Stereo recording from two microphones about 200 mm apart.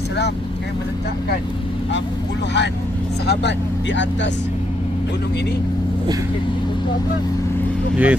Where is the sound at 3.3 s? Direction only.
60° left (ahead or behind).